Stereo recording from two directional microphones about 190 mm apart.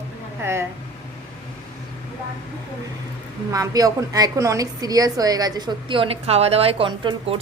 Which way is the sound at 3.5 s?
20° right (ahead or behind).